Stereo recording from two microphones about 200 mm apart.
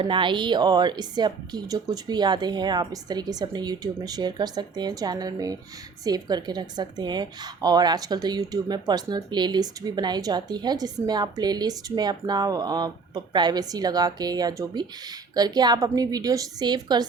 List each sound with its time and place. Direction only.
0.0 s a woman's voice: 25° right (ahead or behind)